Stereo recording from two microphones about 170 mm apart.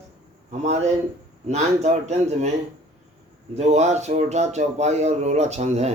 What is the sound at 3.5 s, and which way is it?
Speech, 40° right (ahead or behind).